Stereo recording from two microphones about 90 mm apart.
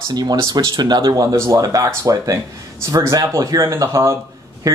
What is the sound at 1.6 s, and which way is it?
Speech, 40° right (ahead or behind).